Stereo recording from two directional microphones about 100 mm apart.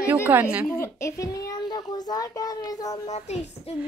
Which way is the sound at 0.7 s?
30° left (ahead or behind).